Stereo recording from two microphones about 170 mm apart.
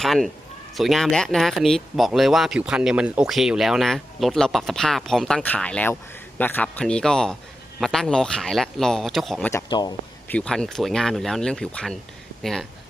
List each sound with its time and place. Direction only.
0.0 s speech: centre (ahead or behind)
9.5 s speech: 20° left (ahead or behind)
10.2 s speech: 5° left (ahead or behind)